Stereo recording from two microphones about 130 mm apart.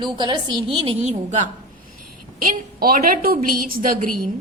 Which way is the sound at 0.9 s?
60° right (ahead or behind).